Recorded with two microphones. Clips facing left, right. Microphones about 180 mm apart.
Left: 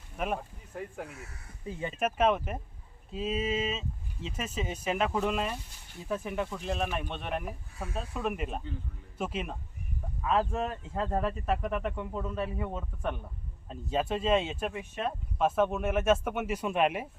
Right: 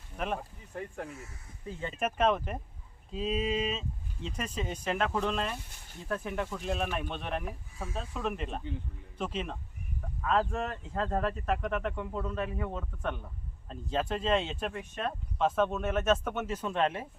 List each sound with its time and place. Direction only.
0.2 s speech: 5° left (ahead or behind)
1.1 s speech: 65° left (ahead or behind)
2.0 s speech: 5° left (ahead or behind)